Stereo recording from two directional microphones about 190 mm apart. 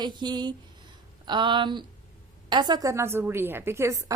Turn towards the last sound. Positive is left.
turn(degrees=-15)  # may be behind; listen again after turning